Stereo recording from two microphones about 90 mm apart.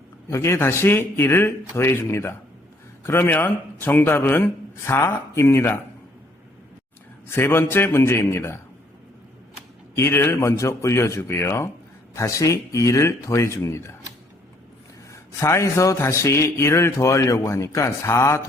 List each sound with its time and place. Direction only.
0.3 s a man's voice: 30° left (ahead or behind)
7.3 s a man's voice: 25° left (ahead or behind)
9.9 s a man's voice: 25° left (ahead or behind)
15.1 s a man's voice: 35° left (ahead or behind)